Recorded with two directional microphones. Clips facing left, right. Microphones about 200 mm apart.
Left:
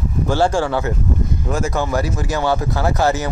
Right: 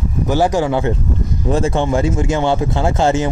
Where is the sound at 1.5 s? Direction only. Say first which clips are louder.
Right 5 dB; 30° right (ahead or behind).